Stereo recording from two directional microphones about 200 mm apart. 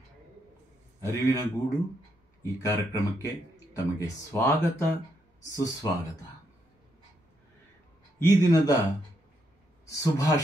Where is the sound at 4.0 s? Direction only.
10° left (ahead or behind).